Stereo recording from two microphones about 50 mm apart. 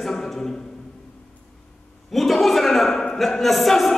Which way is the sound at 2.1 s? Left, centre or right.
Centre.